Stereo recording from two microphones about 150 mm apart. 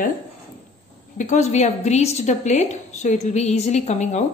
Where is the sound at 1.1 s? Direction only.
50° left (ahead or behind).